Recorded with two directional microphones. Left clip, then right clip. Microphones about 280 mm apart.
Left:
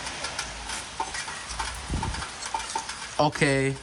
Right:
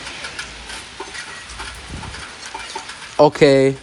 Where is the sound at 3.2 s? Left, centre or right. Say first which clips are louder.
Right 12 dB; centre.